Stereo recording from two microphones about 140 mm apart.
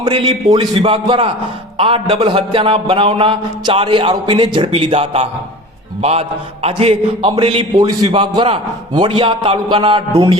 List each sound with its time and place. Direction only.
0.0 s a man's voice: 35° right (ahead or behind)